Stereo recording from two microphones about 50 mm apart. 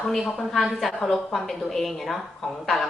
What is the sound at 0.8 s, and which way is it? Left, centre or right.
A woman's voice, centre.